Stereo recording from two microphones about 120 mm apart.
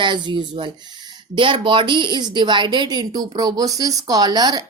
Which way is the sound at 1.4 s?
45° right (ahead or behind).